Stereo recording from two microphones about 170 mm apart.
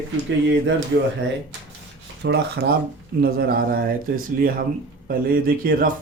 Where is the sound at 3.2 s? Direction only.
65° right (ahead or behind).